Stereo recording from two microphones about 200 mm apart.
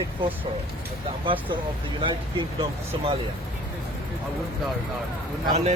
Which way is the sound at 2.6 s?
25° right (ahead or behind).